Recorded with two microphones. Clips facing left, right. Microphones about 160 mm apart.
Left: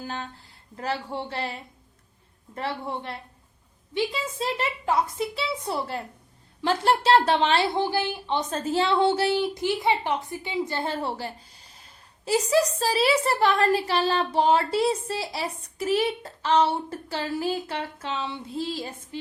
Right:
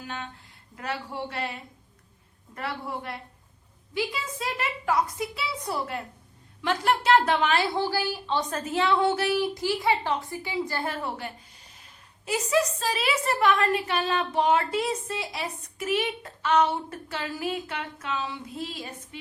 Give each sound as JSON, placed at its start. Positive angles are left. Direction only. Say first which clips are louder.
{"t": 0.0, "sound": "a woman's voice", "louder": "left 3 dB", "side_deg": 35}